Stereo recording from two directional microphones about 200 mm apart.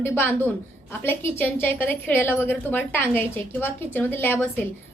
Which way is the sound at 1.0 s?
10° left (ahead or behind).